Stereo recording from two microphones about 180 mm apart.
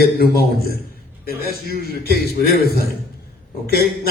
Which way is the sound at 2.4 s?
60° left (ahead or behind).